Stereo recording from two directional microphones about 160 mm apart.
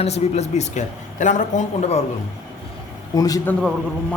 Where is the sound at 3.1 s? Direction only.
20° left (ahead or behind).